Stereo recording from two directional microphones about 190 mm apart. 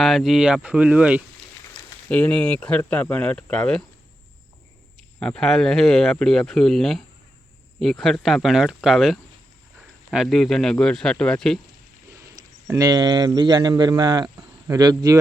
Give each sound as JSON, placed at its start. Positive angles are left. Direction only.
{"t": 0.0, "sound": "speech", "side_deg": 0}
{"t": 2.0, "sound": "speech", "side_deg": 5}
{"t": 4.9, "sound": "speech", "side_deg": 5}
{"t": 12.4, "sound": "speech", "side_deg": -15}